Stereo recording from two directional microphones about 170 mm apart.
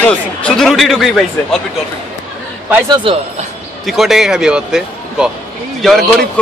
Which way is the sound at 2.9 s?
30° right (ahead or behind).